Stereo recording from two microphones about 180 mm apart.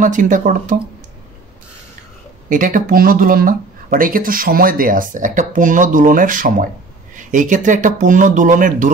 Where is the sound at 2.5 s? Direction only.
50° right (ahead or behind).